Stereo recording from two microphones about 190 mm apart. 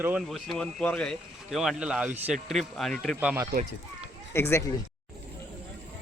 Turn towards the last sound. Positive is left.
turn(degrees=15)  # may be behind; listen again after turning